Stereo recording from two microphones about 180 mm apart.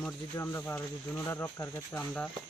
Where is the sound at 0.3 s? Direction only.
10° left (ahead or behind).